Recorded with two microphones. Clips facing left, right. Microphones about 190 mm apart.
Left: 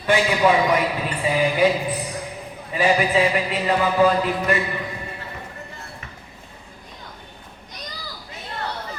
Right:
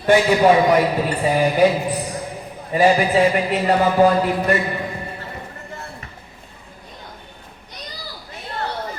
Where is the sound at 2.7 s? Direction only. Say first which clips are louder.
Right 4 dB; 40° right (ahead or behind).